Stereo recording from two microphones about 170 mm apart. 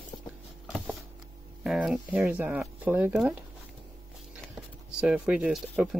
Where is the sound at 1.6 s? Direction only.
5° right (ahead or behind).